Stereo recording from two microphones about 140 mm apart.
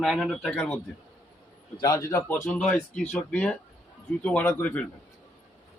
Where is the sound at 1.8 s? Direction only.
25° left (ahead or behind).